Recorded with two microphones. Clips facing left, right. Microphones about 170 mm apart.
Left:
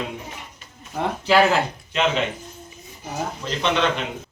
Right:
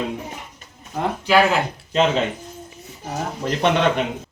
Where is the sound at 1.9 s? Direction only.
35° right (ahead or behind).